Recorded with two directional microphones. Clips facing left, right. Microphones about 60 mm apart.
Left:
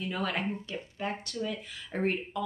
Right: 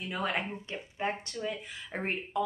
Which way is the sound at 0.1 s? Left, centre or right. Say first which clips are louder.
Right 1 dB; right.